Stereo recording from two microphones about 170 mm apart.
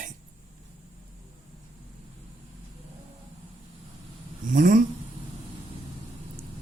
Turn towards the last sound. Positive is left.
turn(degrees=-55)  # may be behind; listen again after turning